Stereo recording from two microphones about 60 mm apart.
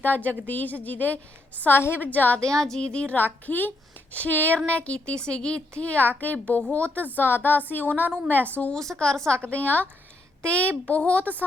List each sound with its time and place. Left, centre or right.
0.0 s a woman's voice: left
2.4 s a woman's voice: centre
3.4 s a woman's voice: left
8.7 s a woman's voice: centre